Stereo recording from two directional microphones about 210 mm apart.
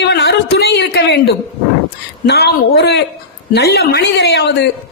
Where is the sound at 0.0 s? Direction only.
50° left (ahead or behind).